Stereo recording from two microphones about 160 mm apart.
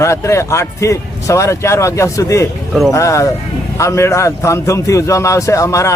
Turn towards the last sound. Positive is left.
turn(degrees=20)  # may be behind; listen again after turning